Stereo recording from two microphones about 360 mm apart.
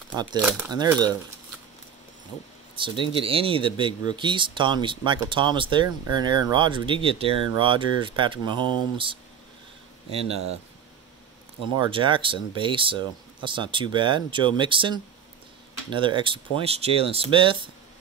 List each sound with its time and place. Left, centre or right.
0.1 s speech: centre
2.7 s speech: centre
11.7 s speech: centre